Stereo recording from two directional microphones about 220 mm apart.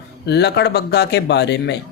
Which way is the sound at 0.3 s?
50° left (ahead or behind).